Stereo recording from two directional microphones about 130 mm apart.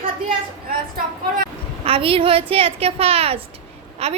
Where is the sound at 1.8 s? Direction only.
45° right (ahead or behind).